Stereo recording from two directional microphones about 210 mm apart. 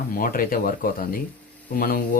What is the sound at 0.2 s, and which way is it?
Speech, 40° left (ahead or behind).